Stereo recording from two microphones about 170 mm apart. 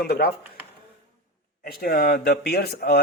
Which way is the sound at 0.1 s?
70° left (ahead or behind).